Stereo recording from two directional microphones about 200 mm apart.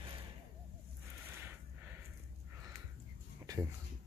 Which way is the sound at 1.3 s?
10° right (ahead or behind).